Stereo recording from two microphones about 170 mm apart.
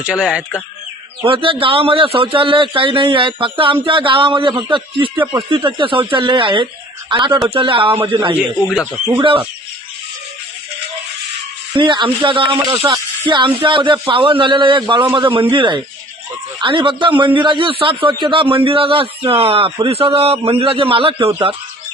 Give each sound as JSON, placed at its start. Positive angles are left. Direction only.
{"t": 0.0, "sound": "speech", "side_deg": -5}
{"t": 1.2, "sound": "a man's voice", "side_deg": -30}
{"t": 11.8, "sound": "a man's voice", "side_deg": -30}